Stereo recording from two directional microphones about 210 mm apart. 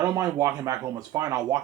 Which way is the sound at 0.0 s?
15° right (ahead or behind).